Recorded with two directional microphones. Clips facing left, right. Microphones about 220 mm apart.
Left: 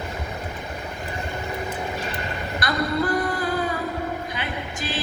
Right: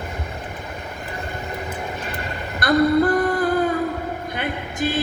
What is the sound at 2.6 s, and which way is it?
Female singing, 55° right (ahead or behind).